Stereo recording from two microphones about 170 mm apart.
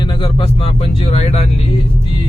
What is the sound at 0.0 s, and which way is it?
Speech, 30° left (ahead or behind).